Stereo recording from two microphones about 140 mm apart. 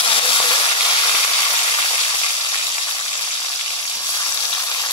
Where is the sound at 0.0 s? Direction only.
40° left (ahead or behind).